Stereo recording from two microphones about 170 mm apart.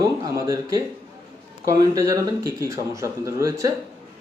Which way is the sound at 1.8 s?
20° right (ahead or behind).